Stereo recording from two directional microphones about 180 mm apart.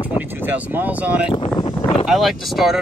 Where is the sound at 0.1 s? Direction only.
10° right (ahead or behind).